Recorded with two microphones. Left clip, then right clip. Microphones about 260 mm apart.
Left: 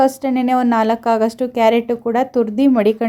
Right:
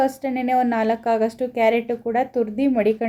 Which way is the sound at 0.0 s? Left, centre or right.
Left.